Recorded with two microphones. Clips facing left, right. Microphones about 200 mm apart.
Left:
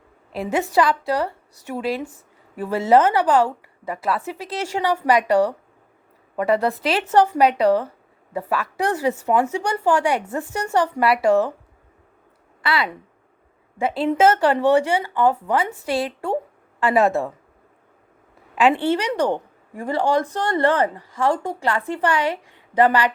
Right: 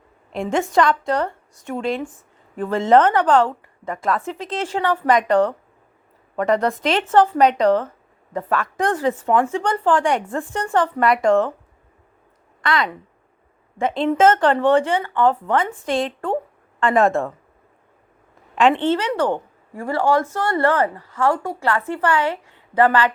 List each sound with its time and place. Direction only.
0.7 s a woman's voice: 5° left (ahead or behind)
12.6 s a woman's voice: 5° left (ahead or behind)
18.5 s a woman's voice: 10° left (ahead or behind)